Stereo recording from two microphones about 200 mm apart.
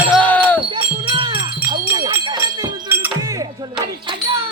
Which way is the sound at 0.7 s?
25° right (ahead or behind).